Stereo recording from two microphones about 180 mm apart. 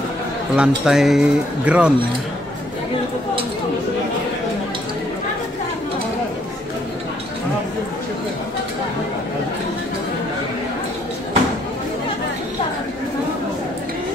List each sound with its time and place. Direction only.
0.6 s speech: 5° right (ahead or behind)